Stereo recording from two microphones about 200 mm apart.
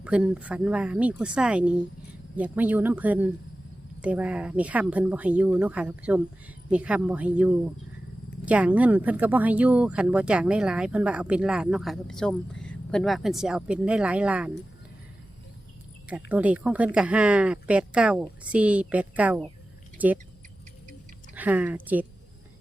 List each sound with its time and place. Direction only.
0.0 s speech: 5° right (ahead or behind)
16.0 s speech: 5° right (ahead or behind)
21.3 s speech: 10° right (ahead or behind)